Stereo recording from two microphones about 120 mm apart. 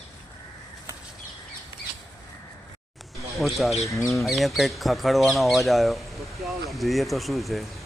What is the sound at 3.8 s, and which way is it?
Speech, 25° left (ahead or behind).